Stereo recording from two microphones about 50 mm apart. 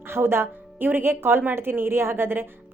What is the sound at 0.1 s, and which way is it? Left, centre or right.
A woman's voice, right.